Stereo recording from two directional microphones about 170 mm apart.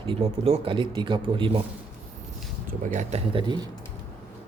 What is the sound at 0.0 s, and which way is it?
Speech, 35° right (ahead or behind).